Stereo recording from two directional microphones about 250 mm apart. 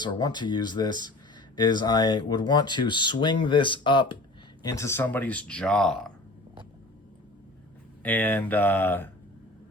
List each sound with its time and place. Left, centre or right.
0.0 s speech: centre
8.0 s speech: centre